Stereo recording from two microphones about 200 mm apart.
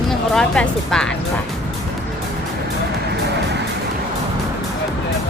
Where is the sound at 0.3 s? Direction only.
5° left (ahead or behind).